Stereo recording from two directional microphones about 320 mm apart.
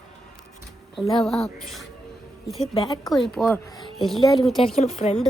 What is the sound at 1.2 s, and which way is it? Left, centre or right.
A woman's voice, centre.